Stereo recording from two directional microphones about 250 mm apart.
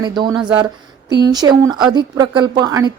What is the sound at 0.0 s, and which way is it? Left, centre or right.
Speech, centre.